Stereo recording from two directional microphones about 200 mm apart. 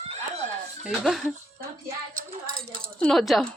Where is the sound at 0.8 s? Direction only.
Centre (ahead or behind).